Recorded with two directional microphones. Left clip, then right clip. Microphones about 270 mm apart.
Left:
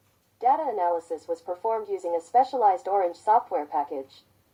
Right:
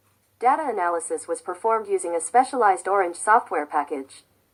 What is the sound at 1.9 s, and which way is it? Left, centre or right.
A woman's voice, right.